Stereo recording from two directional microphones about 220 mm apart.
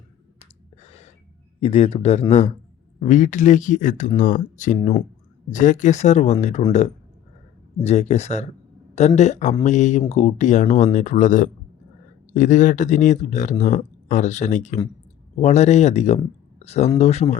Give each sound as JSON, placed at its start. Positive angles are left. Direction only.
{"t": 0.3, "sound": "gasp", "side_deg": 30}
{"t": 1.6, "sound": "speech", "side_deg": 30}